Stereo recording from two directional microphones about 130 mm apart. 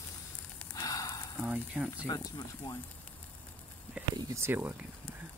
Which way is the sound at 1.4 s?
10° right (ahead or behind).